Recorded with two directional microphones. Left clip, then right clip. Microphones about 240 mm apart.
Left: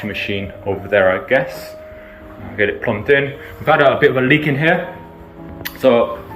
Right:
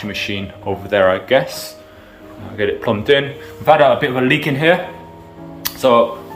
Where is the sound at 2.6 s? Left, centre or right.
Right.